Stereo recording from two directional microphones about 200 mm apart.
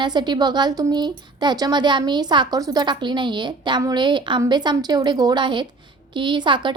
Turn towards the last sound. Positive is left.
turn(degrees=-25)  # may be behind; listen again after turning